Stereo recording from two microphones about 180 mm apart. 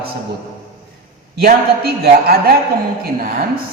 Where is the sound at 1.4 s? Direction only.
60° right (ahead or behind).